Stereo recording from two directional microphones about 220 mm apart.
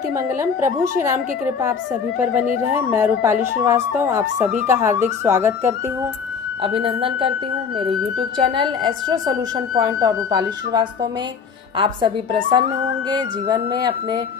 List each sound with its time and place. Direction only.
0.7 s a woman's voice: 10° right (ahead or behind)
6.6 s speech: 25° right (ahead or behind)